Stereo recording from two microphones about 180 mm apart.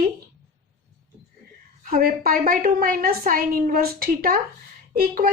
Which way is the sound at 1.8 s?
50° right (ahead or behind).